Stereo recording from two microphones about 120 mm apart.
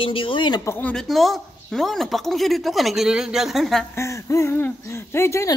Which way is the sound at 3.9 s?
25° left (ahead or behind).